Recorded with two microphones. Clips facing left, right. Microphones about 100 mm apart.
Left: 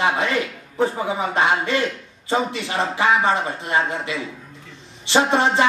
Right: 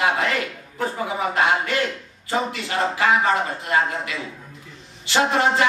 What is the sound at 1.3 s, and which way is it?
Speech, 25° left (ahead or behind).